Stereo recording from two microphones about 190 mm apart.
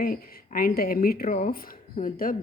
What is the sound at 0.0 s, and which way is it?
Speech, 50° left (ahead or behind).